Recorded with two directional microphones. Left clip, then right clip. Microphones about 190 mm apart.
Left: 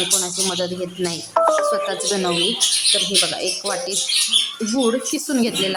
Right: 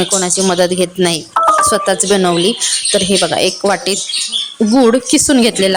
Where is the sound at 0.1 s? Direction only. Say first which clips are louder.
Right 8 dB; 40° right (ahead or behind).